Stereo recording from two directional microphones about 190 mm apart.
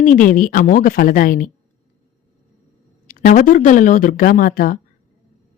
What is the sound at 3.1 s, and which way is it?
A woman's voice, 45° left (ahead or behind).